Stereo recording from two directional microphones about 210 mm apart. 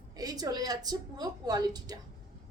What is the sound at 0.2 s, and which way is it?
A woman's voice, 20° right (ahead or behind).